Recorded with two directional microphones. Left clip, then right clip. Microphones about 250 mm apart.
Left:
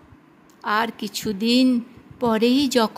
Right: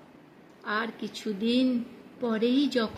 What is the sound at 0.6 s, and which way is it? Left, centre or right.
Speech, left.